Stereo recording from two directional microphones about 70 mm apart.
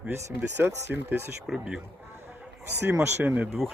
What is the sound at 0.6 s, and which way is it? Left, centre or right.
Speech, right.